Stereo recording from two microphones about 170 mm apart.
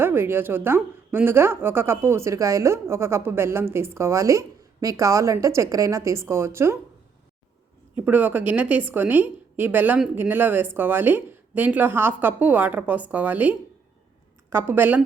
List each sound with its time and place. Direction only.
0.0 s a woman's voice: 15° right (ahead or behind)
7.9 s a woman's voice: 10° right (ahead or behind)